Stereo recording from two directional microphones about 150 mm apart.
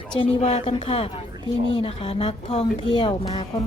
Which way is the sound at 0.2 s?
45° left (ahead or behind).